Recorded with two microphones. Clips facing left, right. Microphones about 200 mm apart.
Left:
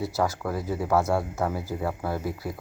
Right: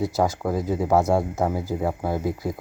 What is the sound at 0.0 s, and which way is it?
Speech, 15° right (ahead or behind).